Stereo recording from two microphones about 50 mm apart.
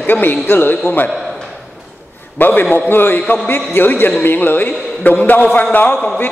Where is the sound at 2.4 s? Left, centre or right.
Left.